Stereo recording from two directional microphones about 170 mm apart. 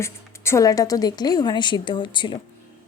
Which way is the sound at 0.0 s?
15° left (ahead or behind).